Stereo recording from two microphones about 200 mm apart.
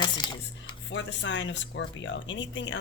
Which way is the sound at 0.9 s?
65° left (ahead or behind).